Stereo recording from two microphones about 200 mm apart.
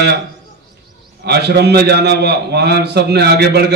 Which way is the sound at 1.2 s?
55° right (ahead or behind).